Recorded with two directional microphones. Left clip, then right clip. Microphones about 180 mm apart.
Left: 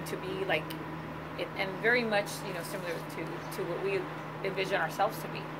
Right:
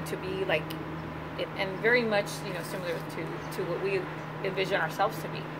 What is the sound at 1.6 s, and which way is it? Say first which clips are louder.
Speech: right 3 dB; 10° right (ahead or behind).